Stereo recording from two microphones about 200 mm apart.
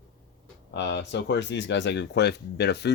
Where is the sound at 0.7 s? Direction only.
60° left (ahead or behind).